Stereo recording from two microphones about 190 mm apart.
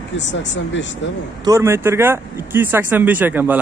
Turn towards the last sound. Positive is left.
turn(degrees=-10)  # may be behind; listen again after turning